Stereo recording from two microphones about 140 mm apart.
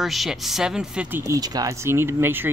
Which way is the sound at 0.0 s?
Centre (ahead or behind).